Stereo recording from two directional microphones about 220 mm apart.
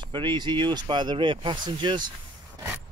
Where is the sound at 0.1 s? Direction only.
20° right (ahead or behind).